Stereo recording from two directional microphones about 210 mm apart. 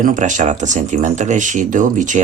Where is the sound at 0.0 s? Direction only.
35° right (ahead or behind).